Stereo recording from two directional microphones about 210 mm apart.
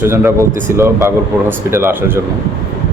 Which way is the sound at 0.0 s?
10° right (ahead or behind).